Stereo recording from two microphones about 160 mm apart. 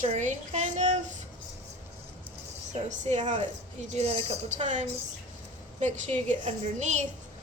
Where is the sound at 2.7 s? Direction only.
45° right (ahead or behind).